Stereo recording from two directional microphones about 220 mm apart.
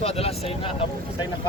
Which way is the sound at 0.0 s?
25° left (ahead or behind).